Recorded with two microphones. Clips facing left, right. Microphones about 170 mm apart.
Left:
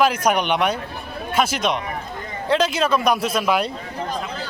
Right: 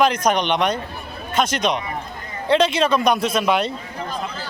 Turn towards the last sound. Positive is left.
turn(degrees=5)  # may be behind; listen again after turning